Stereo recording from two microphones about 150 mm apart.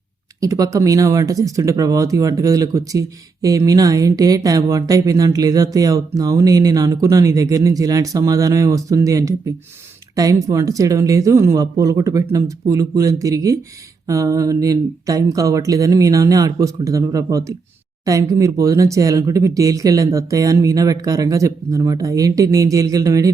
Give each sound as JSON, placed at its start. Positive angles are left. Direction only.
{"t": 0.3, "sound": "speech", "side_deg": -25}
{"t": 10.4, "sound": "speech", "side_deg": -20}